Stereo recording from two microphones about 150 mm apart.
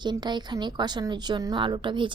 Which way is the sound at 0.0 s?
30° right (ahead or behind).